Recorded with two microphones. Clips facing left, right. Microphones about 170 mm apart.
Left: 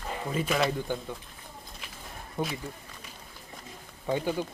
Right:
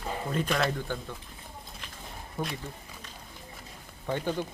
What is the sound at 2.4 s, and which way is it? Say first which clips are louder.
Speech: left 2 dB; 20° left (ahead or behind).